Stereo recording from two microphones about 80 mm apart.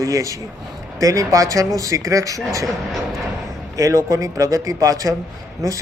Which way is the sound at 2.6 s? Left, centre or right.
Centre.